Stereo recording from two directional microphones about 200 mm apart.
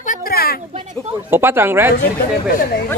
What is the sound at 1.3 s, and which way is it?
Speech, 10° right (ahead or behind).